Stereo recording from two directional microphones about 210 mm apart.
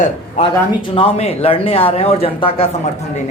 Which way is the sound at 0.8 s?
25° left (ahead or behind).